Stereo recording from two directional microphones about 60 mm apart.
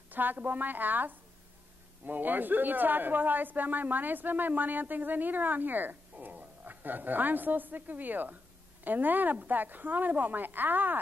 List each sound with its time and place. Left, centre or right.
0.1 s a woman's voice: right